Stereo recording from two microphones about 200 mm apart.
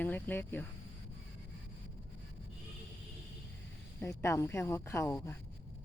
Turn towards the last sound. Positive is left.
turn(degrees=15)  # may be behind; listen again after turning